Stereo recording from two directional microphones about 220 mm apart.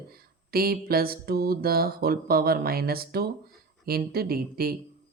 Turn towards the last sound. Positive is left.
turn(degrees=-45)  # may be behind; listen again after turning